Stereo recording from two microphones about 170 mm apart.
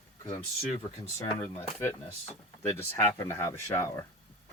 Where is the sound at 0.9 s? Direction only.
20° left (ahead or behind).